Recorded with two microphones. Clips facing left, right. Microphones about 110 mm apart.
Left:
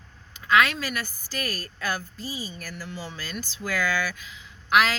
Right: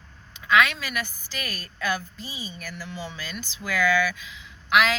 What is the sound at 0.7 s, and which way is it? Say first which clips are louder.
A woman's voice: even; 40° left (ahead or behind).